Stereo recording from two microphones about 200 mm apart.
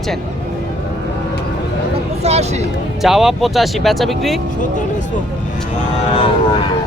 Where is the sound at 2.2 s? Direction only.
30° right (ahead or behind).